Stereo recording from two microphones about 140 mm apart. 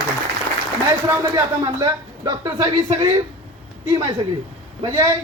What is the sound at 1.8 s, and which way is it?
Speech, 25° right (ahead or behind).